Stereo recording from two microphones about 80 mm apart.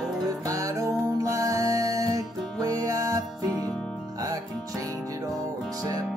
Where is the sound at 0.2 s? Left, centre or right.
Right.